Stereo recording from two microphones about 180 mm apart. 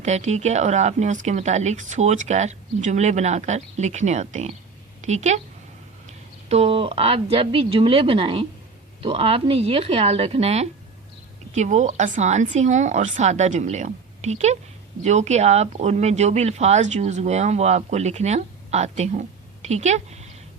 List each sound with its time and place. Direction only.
0.0 s a woman's voice: 40° right (ahead or behind)